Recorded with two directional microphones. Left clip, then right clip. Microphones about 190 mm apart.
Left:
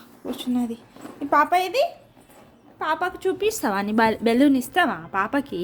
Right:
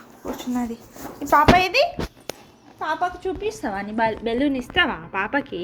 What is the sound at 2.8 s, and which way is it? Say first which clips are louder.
A woman's voice: even; 35° left (ahead or behind).